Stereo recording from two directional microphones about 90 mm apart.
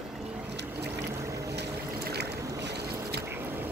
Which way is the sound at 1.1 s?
35° right (ahead or behind).